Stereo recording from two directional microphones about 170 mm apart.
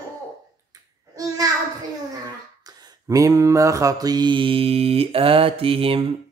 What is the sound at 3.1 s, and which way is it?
Mantra, 20° right (ahead or behind).